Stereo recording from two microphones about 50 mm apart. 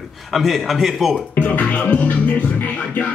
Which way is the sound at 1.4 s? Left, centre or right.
Left.